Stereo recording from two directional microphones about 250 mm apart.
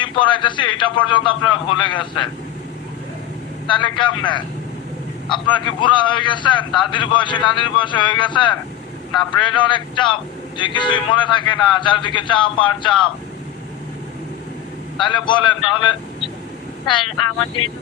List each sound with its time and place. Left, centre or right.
0.0 s a man's voice: centre
3.7 s a man's voice: centre
15.0 s a man's voice: centre